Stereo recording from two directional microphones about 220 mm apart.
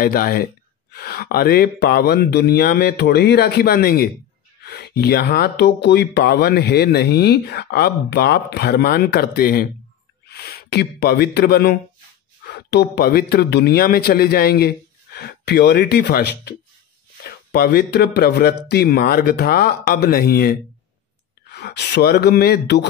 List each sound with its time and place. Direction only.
0.0 s speech: 40° left (ahead or behind)